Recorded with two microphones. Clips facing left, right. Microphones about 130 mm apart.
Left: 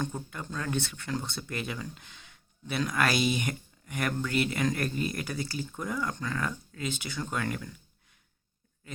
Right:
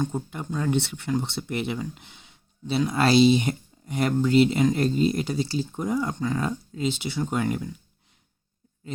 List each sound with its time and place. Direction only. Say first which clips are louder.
0.0 s speech: right 6 dB; 25° right (ahead or behind)